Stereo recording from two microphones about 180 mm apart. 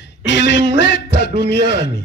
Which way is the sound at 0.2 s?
80° left.